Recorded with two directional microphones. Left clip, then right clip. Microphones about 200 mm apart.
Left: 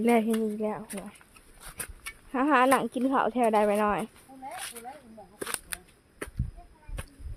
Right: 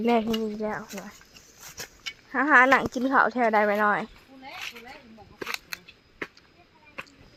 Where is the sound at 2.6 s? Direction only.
Centre (ahead or behind).